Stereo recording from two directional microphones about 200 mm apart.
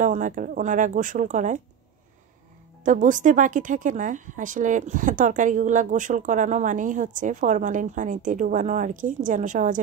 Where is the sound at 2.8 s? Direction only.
40° right (ahead or behind).